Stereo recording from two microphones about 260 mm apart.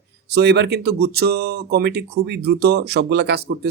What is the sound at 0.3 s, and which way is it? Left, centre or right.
Speech, right.